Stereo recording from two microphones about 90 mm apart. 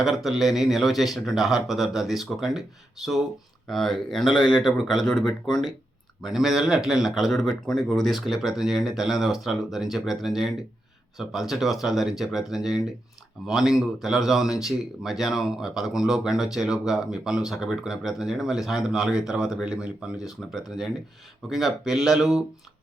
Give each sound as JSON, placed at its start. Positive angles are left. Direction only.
{"t": 0.0, "sound": "speech", "side_deg": -5}
{"t": 3.7, "sound": "speech", "side_deg": 5}